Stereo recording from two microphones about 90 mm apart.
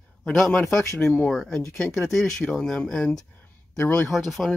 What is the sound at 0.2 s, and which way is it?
Speech, 5° left (ahead or behind).